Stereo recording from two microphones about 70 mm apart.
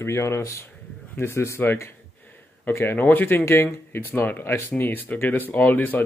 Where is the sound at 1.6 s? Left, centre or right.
Left.